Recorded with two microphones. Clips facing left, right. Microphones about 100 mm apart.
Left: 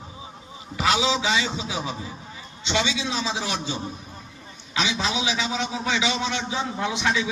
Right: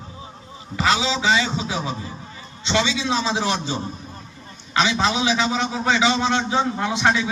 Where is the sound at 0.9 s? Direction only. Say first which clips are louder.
Right 1 dB; 60° left (ahead or behind).